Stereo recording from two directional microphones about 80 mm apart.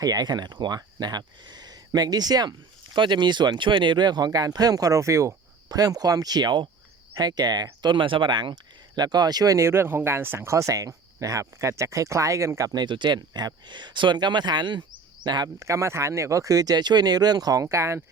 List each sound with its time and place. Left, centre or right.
0.0 s speech: right
0.8 s speech: right
5.6 s speech: right
7.2 s speech: right
9.0 s speech: right
12.7 s speech: right
15.5 s speech: right